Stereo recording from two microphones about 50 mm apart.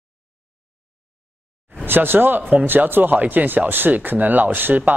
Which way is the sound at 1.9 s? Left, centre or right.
Right.